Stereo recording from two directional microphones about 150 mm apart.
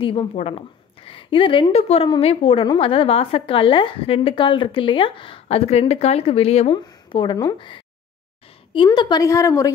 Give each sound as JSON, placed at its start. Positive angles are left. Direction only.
{"t": 0.0, "sound": "a woman's voice", "side_deg": 35}